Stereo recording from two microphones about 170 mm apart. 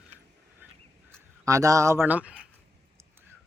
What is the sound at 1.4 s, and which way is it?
Speech, 20° right (ahead or behind).